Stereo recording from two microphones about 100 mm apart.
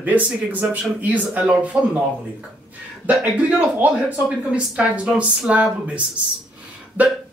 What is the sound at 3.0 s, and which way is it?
Speech, 15° right (ahead or behind).